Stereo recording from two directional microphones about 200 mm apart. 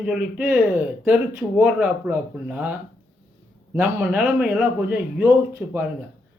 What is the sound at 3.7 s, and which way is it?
Speech, 10° right (ahead or behind).